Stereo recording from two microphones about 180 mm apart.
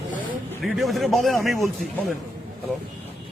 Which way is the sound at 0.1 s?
50° right (ahead or behind).